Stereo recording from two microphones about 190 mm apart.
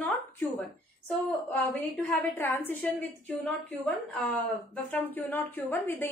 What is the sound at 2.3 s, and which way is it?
Speech, 10° left (ahead or behind).